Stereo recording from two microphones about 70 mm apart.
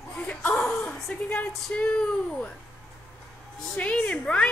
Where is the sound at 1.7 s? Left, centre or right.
Left.